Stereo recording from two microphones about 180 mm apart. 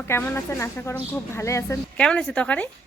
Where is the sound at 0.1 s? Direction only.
15° left (ahead or behind).